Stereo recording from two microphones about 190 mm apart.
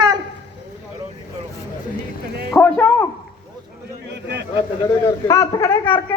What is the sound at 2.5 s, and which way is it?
Speech, 10° left (ahead or behind).